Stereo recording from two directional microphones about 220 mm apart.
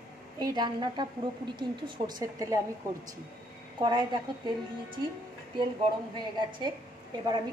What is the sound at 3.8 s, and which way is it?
Speech, 20° right (ahead or behind).